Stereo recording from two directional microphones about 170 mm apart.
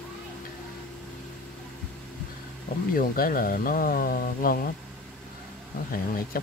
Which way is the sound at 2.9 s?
55° left (ahead or behind).